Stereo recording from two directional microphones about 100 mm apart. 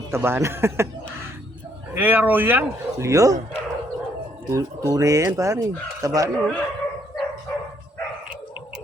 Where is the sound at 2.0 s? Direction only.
20° right (ahead or behind).